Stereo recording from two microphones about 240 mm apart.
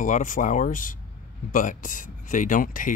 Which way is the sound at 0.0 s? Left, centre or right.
Left.